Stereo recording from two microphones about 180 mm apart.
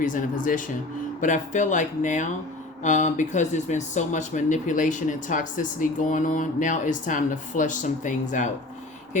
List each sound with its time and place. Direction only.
0.0 s speech: 45° left (ahead or behind)